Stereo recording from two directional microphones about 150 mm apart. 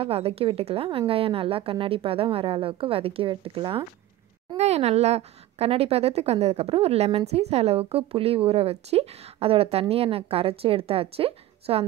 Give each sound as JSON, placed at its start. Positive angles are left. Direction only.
{"t": 0.0, "sound": "a woman's voice", "side_deg": -40}